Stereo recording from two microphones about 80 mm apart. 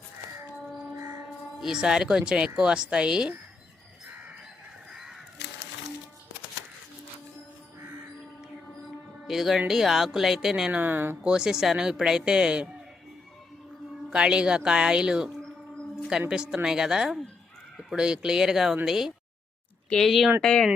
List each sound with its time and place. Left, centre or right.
1.5 s speech: centre
4.9 s crow: centre
9.2 s speech: centre
10.7 s speech: right
11.2 s speech: centre
14.1 s speech: centre
16.3 s speech: centre
20.4 s speech: centre